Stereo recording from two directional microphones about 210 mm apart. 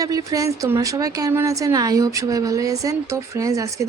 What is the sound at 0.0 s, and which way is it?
Speech, 15° right (ahead or behind).